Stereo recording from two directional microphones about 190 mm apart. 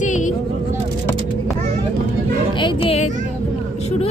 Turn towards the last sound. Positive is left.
turn(degrees=35)  # may be behind; listen again after turning